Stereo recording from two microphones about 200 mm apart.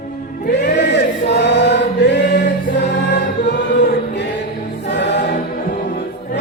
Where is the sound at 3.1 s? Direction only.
60° left (ahead or behind).